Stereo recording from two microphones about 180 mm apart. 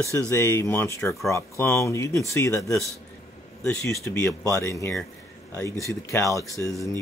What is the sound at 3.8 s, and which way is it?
Speech, 15° left (ahead or behind).